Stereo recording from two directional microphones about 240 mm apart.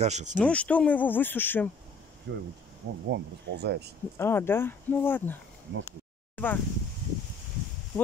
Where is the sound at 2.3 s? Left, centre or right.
Right.